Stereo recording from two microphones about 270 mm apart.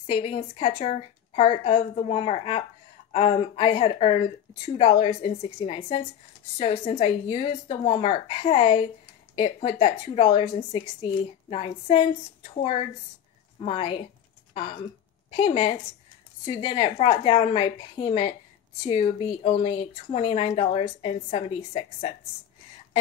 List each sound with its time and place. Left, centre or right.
0.0 s speech: left
13.6 s speech: left